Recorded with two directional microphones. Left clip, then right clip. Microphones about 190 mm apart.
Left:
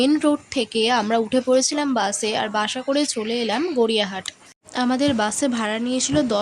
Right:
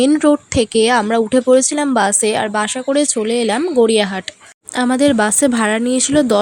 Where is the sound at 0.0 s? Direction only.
30° right (ahead or behind).